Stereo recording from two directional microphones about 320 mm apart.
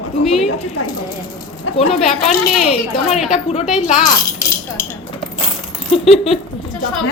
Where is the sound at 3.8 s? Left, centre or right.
Left.